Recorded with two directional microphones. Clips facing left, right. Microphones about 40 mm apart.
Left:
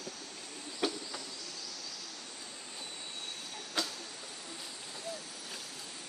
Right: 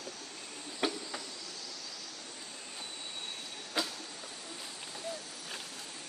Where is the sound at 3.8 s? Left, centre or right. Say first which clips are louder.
Right 1 dB; centre.